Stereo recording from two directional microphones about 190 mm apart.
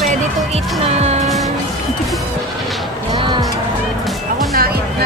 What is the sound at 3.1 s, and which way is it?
Music, 25° right (ahead or behind).